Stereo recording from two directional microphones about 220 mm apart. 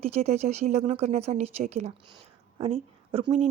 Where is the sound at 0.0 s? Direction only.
30° right (ahead or behind).